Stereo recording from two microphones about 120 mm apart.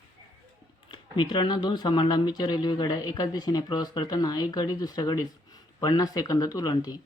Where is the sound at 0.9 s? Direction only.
40° left (ahead or behind).